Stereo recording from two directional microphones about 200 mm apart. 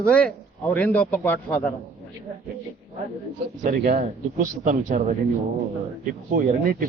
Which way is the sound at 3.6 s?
40° right (ahead or behind).